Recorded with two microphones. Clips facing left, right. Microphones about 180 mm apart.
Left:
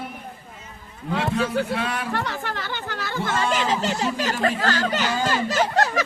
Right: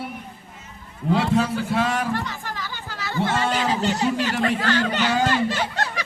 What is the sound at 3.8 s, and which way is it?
Speech, 40° left (ahead or behind).